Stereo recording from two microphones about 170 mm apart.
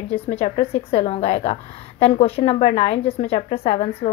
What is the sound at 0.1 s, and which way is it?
Speech, 35° left (ahead or behind).